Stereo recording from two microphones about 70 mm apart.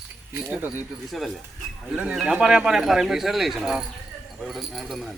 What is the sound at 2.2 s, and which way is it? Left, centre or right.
Speech, centre.